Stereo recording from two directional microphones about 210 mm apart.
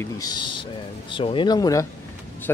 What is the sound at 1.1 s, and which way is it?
Speech, 25° left (ahead or behind).